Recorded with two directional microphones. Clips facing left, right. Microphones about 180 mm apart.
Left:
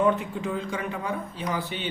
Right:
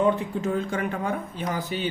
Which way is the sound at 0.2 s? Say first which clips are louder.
Right 4 dB; 45° right (ahead or behind).